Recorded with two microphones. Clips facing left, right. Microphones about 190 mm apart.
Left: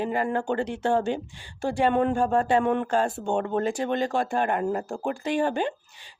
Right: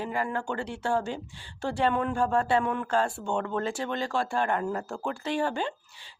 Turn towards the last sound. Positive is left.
turn(degrees=15)  # may be behind; listen again after turning